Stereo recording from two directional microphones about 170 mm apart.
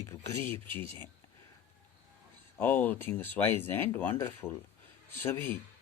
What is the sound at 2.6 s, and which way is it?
Speech, 10° left (ahead or behind).